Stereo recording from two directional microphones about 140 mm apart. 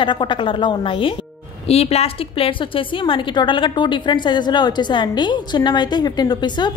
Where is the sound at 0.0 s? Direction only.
35° left (ahead or behind).